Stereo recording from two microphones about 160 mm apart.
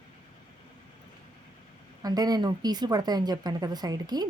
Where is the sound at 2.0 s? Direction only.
25° right (ahead or behind).